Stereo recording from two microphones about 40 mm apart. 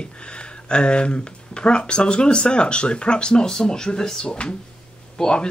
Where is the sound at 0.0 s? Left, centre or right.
Left.